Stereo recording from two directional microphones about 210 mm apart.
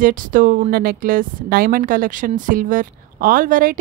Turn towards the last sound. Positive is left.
turn(degrees=-40)  # may be behind; listen again after turning